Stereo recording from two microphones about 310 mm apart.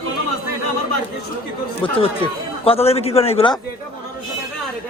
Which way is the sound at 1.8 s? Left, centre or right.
Centre.